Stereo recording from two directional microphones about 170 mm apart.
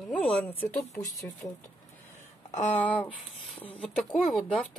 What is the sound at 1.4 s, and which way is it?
Speech, 20° left (ahead or behind).